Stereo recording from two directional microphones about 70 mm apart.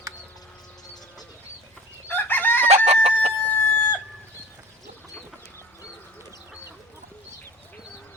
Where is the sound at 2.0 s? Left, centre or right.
Left.